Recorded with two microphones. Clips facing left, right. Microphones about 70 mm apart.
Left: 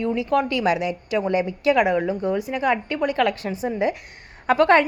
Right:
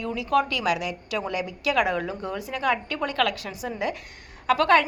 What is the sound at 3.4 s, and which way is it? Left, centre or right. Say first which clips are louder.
A woman's voice: left 6 dB; left.